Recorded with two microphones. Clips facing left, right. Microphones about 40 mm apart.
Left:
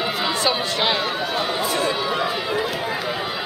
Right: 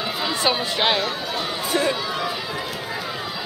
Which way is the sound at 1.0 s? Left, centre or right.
Centre.